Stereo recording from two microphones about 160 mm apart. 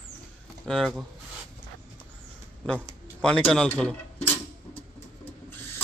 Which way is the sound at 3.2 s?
5° left (ahead or behind).